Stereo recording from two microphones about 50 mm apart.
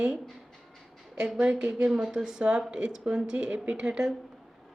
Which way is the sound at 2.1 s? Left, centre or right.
Centre.